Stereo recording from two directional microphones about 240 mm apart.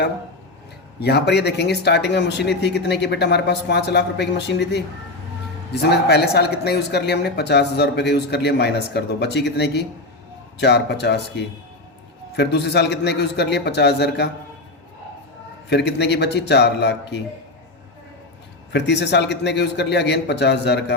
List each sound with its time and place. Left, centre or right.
0.9 s speech: left
5.8 s speech: left
15.7 s speech: left
18.7 s speech: left